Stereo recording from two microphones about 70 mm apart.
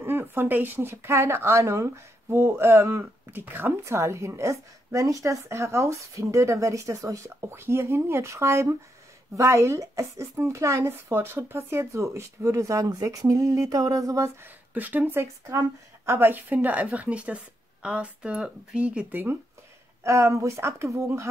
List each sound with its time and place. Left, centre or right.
0.0 s a woman's voice: right
3.8 s speech: right
14.4 s a woman's voice: right
20.0 s speech: right